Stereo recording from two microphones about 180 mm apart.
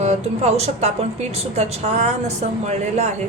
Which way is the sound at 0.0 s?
40° right (ahead or behind).